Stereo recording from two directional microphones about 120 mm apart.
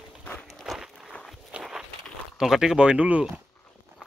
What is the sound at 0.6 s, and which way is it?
Walk, centre (ahead or behind).